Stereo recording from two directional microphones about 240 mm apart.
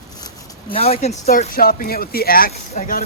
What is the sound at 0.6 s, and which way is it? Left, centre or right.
Speech, left.